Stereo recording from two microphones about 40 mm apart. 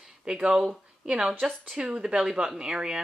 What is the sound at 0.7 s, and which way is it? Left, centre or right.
Speech, right.